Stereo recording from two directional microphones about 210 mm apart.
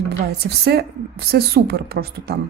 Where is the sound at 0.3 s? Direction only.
50° right (ahead or behind).